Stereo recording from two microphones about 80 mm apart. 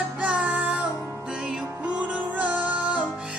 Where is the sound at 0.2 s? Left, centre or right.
Centre.